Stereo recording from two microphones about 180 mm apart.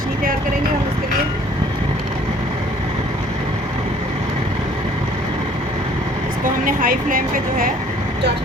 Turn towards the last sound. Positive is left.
turn(degrees=-50)  # may be behind; listen again after turning